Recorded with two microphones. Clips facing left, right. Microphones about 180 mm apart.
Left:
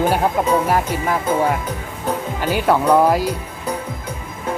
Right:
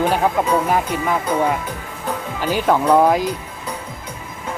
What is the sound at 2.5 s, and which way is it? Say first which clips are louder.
Speech: even; 10° left (ahead or behind).